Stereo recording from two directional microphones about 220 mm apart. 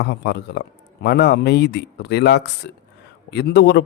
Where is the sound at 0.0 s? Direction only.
50° left (ahead or behind).